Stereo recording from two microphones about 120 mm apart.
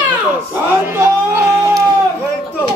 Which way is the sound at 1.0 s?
20° right (ahead or behind).